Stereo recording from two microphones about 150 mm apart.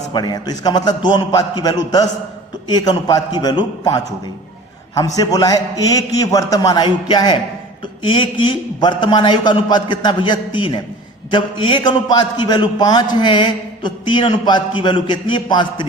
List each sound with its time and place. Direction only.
0.1 s a man's voice: 30° left (ahead or behind)